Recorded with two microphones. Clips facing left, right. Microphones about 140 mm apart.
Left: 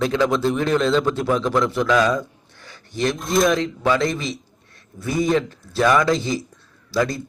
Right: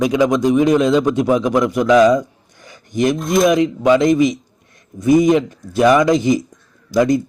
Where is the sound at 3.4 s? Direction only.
20° right (ahead or behind).